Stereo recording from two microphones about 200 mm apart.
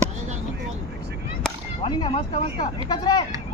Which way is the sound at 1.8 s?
20° left (ahead or behind).